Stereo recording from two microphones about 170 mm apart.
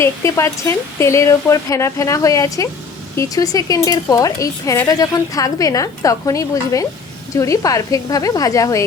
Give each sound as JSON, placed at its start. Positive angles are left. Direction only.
{"t": 0.0, "sound": "speech", "side_deg": 15}